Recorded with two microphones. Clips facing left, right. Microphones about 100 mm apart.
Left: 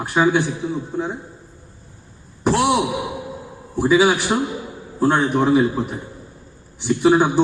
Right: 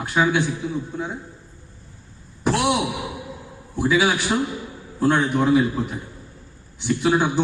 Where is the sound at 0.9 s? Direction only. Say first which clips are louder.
Left 4 dB; 20° left (ahead or behind).